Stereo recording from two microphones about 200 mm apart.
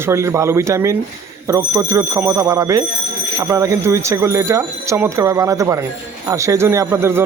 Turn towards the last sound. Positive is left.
turn(degrees=-10)  # may be behind; listen again after turning